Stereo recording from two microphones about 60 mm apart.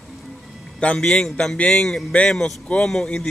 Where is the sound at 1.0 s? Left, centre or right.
Centre.